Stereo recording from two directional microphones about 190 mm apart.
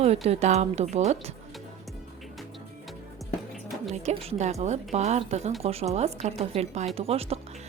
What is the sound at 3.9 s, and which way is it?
A woman's voice, 35° right (ahead or behind).